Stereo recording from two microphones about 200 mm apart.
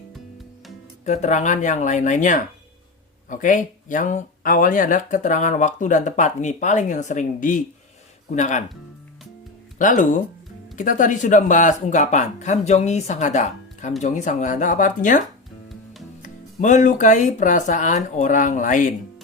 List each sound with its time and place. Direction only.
1.0 s speech: 35° left (ahead or behind)
9.7 s speech: 40° left (ahead or behind)
16.2 s speech: 40° left (ahead or behind)